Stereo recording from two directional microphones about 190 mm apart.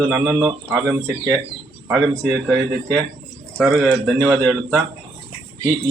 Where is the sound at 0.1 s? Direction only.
15° right (ahead or behind).